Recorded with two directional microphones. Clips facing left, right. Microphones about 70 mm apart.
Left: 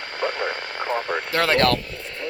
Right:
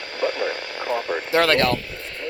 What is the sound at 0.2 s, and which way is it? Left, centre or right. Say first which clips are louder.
Radio: right 2 dB; left.